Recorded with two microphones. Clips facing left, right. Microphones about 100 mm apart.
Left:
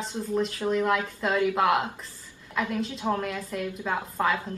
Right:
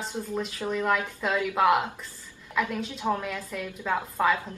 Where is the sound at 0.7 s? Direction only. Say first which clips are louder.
Even; centre (ahead or behind).